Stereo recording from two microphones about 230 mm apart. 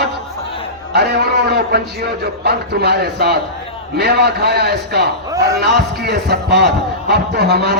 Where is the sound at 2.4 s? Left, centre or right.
Right.